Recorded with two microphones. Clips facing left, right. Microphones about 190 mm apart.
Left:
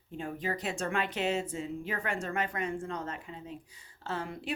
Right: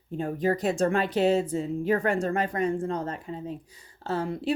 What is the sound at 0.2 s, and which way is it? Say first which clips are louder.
Speech: right 9 dB; 40° right (ahead or behind).